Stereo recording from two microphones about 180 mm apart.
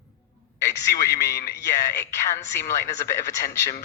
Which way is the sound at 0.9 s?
15° left (ahead or behind).